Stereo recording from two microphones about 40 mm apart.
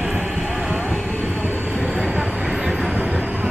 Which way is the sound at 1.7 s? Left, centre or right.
Right.